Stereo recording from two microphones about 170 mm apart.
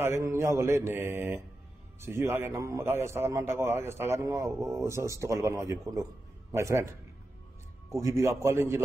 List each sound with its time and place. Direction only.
0.0 s a man's voice: 15° right (ahead or behind)